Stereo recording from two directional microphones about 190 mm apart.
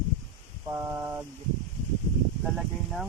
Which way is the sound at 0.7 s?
15° right (ahead or behind).